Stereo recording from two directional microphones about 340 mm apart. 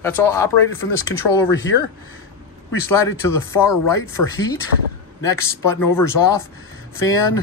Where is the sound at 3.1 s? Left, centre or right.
Left.